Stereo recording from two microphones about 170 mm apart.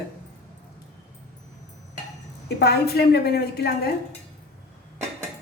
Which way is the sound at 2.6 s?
70° left (ahead or behind).